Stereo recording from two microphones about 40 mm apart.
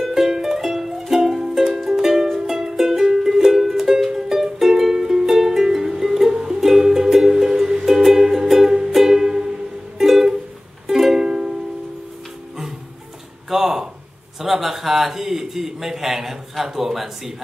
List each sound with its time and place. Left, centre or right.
0.0 s music: centre
13.5 s a sound: centre
14.4 s a man's voice: centre